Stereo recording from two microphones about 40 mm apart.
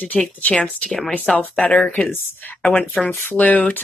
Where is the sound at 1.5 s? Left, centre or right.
Left.